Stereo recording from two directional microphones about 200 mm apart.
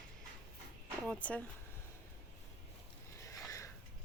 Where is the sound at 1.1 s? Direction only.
5° left (ahead or behind).